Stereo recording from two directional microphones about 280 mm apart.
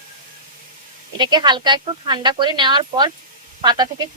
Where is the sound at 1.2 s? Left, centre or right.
Centre.